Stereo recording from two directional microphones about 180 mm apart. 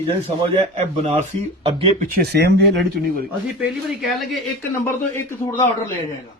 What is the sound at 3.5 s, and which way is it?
Speech, centre (ahead or behind).